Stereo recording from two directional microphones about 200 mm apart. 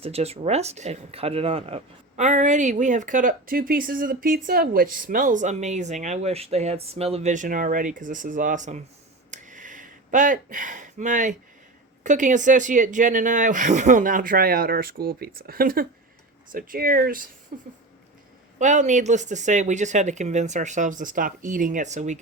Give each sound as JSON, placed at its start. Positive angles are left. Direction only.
{"t": 0.0, "sound": "speech", "side_deg": -30}
{"t": 9.3, "sound": "a sound", "side_deg": -40}
{"t": 12.0, "sound": "speech", "side_deg": -40}